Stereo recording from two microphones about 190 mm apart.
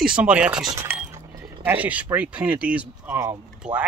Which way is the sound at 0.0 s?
5° right (ahead or behind).